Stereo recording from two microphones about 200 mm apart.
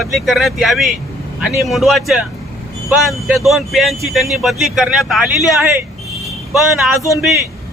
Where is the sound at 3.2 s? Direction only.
Centre (ahead or behind).